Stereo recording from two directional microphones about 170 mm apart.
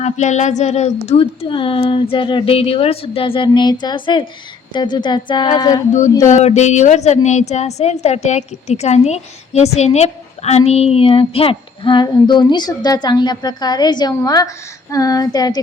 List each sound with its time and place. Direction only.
0.0 s a woman's voice: 45° left (ahead or behind); by 5.8 s 25° left (ahead or behind)
6.2 s a woman's voice: 40° left (ahead or behind); by 15.6 s 25° left (ahead or behind)